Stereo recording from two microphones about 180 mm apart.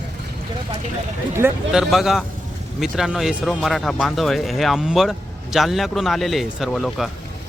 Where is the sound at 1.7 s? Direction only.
Centre (ahead or behind).